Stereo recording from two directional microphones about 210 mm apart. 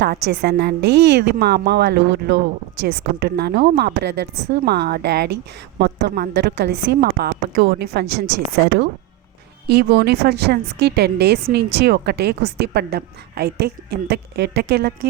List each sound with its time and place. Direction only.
0.0 s a woman's voice: 50° right (ahead or behind)